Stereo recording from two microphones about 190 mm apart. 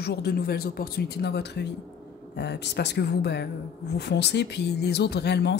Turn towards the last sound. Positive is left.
turn(degrees=60)  # may be behind; listen again after turning